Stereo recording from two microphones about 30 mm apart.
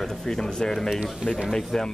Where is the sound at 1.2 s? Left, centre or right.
Right.